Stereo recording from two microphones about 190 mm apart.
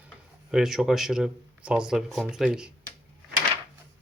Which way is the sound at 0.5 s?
Centre (ahead or behind).